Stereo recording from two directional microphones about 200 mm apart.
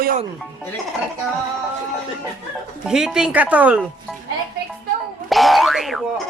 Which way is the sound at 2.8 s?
5° right (ahead or behind).